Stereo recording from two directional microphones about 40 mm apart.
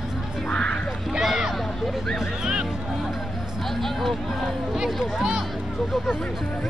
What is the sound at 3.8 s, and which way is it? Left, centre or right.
Music, centre.